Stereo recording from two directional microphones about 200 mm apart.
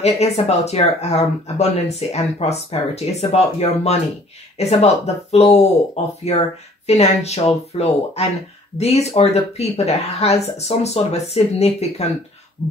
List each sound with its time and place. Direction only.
0.2 s speech: 30° left (ahead or behind)